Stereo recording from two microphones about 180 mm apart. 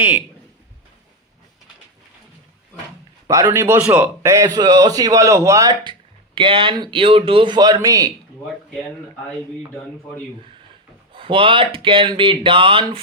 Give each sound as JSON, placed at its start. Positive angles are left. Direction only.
{"t": 3.2, "sound": "a man's voice", "side_deg": -20}
{"t": 11.1, "sound": "a man's voice", "side_deg": -30}